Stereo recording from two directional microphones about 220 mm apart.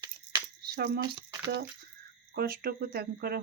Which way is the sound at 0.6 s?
45° right (ahead or behind).